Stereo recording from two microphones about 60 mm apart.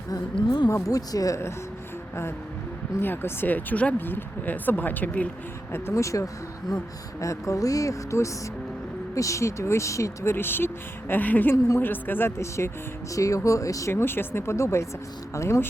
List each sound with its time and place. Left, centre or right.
0.7 s speech: left
3.0 s speech: left
5.9 s speech: left
10.3 s speech: left
12.4 s speech: left
13.1 s speech: left
13.9 s speech: left